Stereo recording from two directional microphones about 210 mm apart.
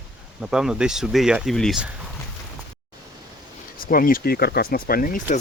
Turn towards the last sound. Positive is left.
turn(degrees=40)  # may be behind; listen again after turning